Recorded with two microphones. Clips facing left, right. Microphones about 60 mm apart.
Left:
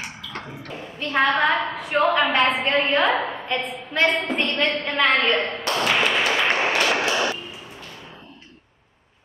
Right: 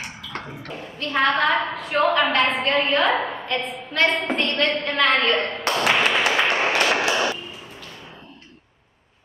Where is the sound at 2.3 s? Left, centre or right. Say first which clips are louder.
Even; centre.